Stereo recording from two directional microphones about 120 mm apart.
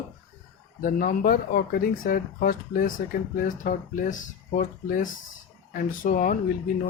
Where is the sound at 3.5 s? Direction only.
90° left.